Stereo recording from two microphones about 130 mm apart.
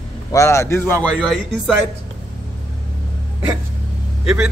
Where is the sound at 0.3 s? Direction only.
25° left (ahead or behind).